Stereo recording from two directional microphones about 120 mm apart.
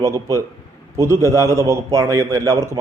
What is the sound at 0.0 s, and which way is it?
A man's voice, 25° right (ahead or behind).